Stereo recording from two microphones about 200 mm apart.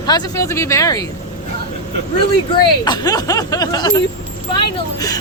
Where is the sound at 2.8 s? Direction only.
20° left (ahead or behind).